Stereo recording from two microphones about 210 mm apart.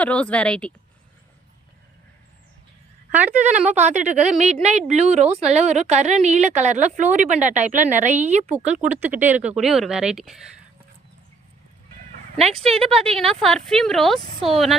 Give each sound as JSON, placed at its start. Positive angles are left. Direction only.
{"t": 0.0, "sound": "speech", "side_deg": 5}
{"t": 3.1, "sound": "a woman's voice", "side_deg": -10}
{"t": 3.7, "sound": "a woman's voice", "side_deg": -35}
{"t": 8.5, "sound": "speech", "side_deg": -5}
{"t": 12.5, "sound": "speech", "side_deg": -30}
{"t": 13.1, "sound": "speech", "side_deg": 0}